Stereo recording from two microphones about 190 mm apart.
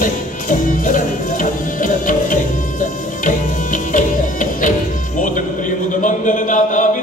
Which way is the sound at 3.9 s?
45° left (ahead or behind).